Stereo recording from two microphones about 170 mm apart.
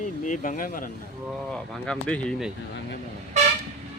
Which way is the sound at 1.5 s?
5° left (ahead or behind).